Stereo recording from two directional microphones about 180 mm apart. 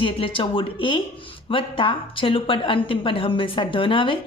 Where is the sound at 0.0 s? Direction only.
30° left (ahead or behind).